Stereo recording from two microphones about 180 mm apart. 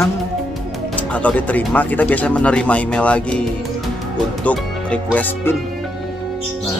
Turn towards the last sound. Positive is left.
turn(degrees=10)  # may be behind; listen again after turning